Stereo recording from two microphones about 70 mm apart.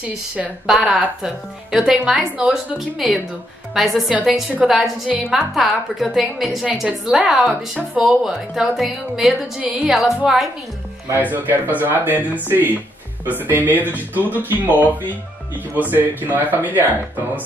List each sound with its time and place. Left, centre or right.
0.7 s a woman's voice: centre
4.1 s speech: centre
4.6 s a woman's voice: centre
11.1 s speech: right